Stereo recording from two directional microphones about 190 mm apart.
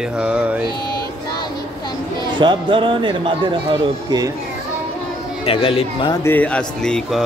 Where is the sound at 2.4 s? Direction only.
25° right (ahead or behind).